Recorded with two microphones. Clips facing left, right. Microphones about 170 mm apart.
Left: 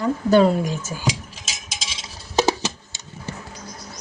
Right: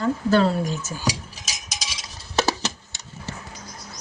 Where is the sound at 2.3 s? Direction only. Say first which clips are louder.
Left 3 dB; 15° left (ahead or behind).